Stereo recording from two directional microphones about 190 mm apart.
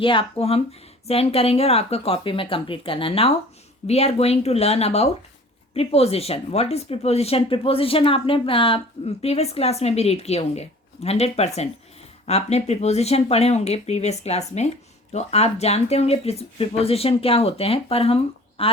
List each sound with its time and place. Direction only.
0.0 s speech: 25° left (ahead or behind)